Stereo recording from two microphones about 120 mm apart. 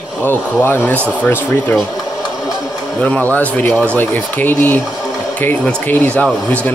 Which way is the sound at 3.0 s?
10° left (ahead or behind).